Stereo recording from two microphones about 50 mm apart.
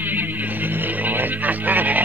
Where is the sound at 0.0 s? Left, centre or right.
Right.